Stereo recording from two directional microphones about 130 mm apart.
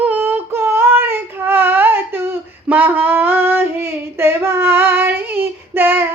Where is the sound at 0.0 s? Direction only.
15° right (ahead or behind).